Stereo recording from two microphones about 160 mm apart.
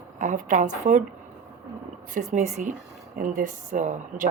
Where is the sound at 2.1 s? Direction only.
50° right (ahead or behind).